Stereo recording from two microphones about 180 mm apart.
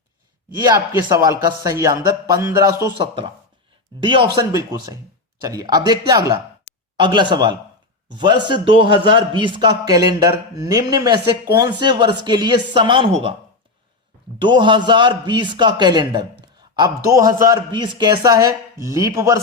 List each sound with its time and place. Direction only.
0.6 s a man's voice: 20° right (ahead or behind)
4.0 s a man's voice: 25° right (ahead or behind)
14.3 s a man's voice: 25° right (ahead or behind)